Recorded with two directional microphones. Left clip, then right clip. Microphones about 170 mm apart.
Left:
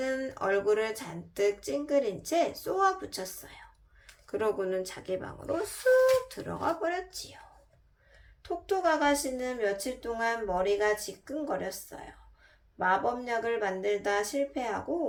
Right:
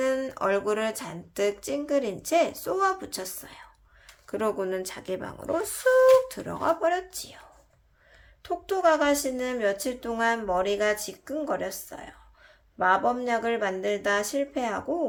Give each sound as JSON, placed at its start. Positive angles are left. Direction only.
{"t": 0.0, "sound": "speech", "side_deg": -30}
{"t": 8.4, "sound": "speech", "side_deg": -35}